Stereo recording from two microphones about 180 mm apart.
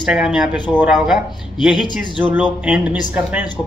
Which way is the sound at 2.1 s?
10° right (ahead or behind).